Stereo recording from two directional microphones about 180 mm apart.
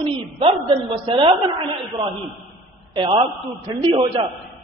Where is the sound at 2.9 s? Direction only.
30° right (ahead or behind).